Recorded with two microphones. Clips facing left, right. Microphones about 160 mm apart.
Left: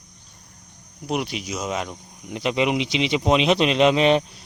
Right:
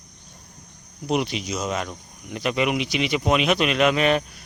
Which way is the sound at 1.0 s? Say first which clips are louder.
Right 2 dB; 5° left (ahead or behind).